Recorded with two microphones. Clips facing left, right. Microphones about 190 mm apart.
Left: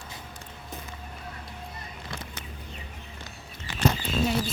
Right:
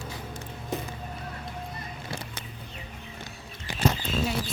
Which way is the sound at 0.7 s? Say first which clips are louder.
Right 10 dB; 75° right (ahead or behind).